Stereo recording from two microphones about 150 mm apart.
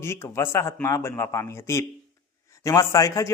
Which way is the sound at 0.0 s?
20° left (ahead or behind).